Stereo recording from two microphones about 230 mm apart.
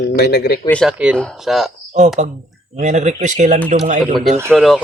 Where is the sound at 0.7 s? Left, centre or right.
Centre.